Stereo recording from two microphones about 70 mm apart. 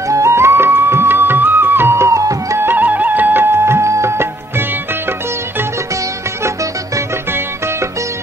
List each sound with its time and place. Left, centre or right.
0.1 s music: right
2.6 s music: right